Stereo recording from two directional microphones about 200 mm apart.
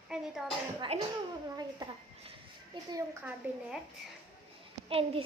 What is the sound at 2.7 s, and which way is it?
Speech, 20° right (ahead or behind).